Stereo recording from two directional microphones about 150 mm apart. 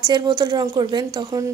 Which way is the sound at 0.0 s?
30° right (ahead or behind).